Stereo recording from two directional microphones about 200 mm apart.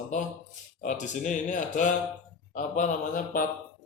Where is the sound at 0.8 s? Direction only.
40° left (ahead or behind).